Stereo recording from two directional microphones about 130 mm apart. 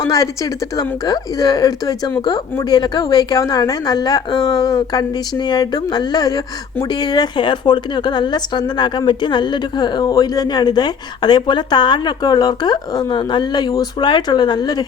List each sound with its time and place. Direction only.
0.0 s a woman's voice: 25° left (ahead or behind)